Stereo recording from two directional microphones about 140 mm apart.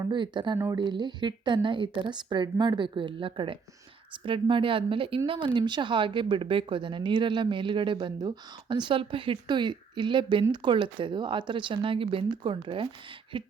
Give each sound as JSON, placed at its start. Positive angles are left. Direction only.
{"t": 0.1, "sound": "speech", "side_deg": -35}